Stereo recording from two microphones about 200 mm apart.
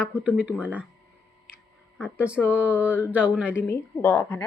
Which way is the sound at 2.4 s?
Centre (ahead or behind).